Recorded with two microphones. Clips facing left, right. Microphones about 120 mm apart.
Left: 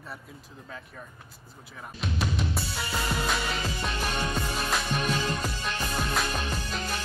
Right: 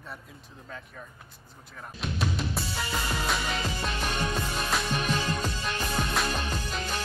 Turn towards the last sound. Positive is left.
turn(degrees=0)  # may be behind; listen again after turning